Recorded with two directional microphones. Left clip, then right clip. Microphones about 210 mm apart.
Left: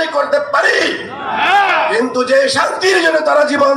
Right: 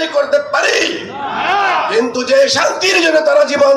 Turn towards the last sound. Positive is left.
turn(degrees=-25)  # may be behind; listen again after turning